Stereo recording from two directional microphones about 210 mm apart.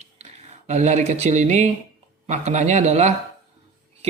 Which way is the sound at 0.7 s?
35° right (ahead or behind).